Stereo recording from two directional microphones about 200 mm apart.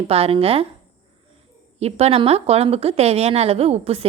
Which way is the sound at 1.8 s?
30° right (ahead or behind).